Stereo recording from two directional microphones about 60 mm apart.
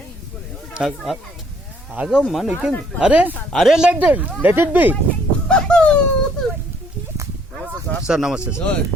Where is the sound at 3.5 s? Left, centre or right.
Centre.